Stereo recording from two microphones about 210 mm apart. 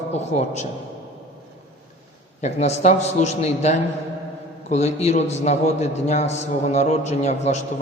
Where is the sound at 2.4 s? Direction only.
30° left (ahead or behind).